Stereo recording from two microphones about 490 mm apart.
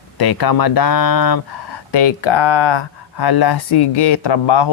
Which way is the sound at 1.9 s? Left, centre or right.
Left.